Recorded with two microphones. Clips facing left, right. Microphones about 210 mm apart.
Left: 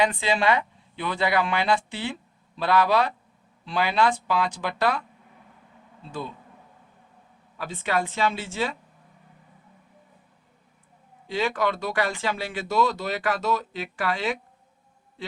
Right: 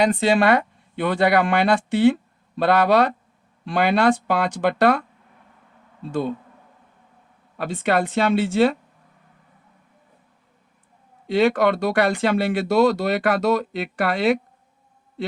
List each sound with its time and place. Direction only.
0.0 s speech: 40° right (ahead or behind); by 3.1 s 60° right (ahead or behind)
3.7 s speech: 50° right (ahead or behind)
7.5 s speech: 60° right (ahead or behind)
11.3 s speech: 65° right (ahead or behind)